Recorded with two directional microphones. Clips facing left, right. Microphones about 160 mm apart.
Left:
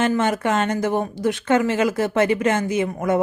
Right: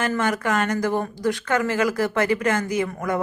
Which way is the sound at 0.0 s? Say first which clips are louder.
Left 3 dB; 25° left (ahead or behind).